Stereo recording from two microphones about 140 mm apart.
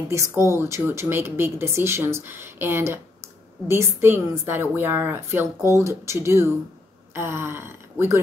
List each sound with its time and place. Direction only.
0.4 s a woman's voice: 20° right (ahead or behind)